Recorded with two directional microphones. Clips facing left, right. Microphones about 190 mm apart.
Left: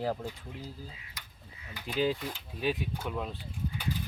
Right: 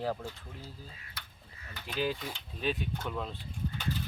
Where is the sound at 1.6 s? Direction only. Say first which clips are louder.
Left 4 dB; 10° left (ahead or behind).